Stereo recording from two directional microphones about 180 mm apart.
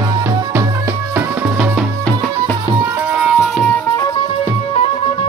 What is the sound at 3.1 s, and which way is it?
Music, 5° right (ahead or behind).